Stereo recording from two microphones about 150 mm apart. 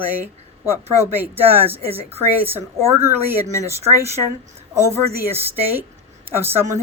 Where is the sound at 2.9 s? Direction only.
15° right (ahead or behind).